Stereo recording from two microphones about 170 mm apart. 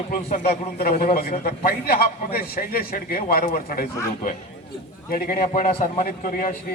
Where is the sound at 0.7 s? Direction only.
65° left (ahead or behind).